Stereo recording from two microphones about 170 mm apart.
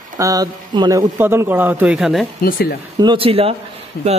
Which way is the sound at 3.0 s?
30° right (ahead or behind).